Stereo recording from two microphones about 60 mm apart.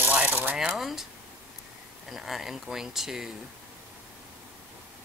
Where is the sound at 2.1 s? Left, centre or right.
Centre.